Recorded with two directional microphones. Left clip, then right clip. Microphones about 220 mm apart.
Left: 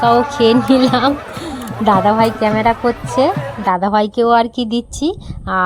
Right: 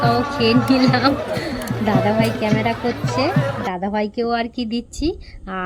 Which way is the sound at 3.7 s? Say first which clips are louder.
Left 9 dB; 60° left (ahead or behind).